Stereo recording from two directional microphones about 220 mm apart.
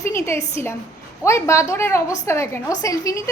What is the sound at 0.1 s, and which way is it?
A woman's voice, 10° left (ahead or behind).